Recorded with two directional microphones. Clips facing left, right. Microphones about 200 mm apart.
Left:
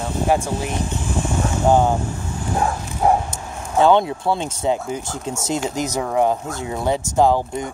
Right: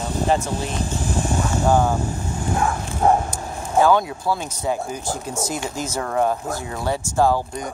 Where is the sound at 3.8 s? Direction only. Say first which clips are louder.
Left 2 dB; 25° left (ahead or behind).